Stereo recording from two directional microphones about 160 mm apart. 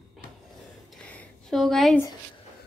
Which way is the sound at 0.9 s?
5° left (ahead or behind).